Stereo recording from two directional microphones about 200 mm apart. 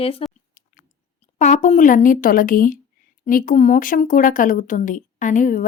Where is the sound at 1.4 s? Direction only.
35° left (ahead or behind).